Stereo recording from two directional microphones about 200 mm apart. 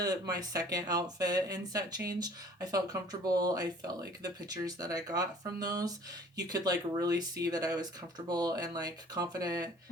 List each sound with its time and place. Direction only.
0.0 s speech: 20° right (ahead or behind)